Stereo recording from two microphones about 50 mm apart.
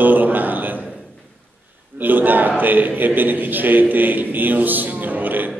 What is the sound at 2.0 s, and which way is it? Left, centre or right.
A man's voice, right.